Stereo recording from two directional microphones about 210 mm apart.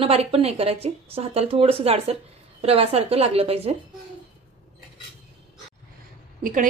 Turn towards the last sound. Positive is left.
turn(degrees=-40)  # may be behind; listen again after turning